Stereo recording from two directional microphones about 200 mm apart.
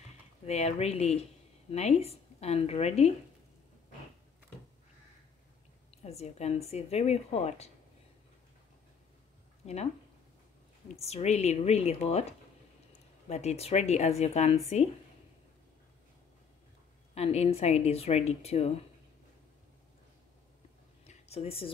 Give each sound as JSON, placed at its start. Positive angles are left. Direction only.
{"t": 0.5, "sound": "a woman's voice", "side_deg": 30}
{"t": 6.0, "sound": "a woman's voice", "side_deg": 30}
{"t": 11.0, "sound": "a woman's voice", "side_deg": 30}
{"t": 17.1, "sound": "a woman's voice", "side_deg": 30}
{"t": 21.0, "sound": "a sound", "side_deg": 30}